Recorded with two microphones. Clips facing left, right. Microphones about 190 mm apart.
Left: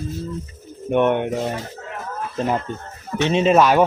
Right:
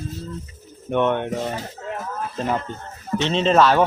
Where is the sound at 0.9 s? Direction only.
15° left (ahead or behind).